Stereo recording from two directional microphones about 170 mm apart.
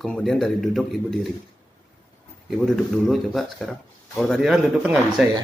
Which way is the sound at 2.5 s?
Centre (ahead or behind).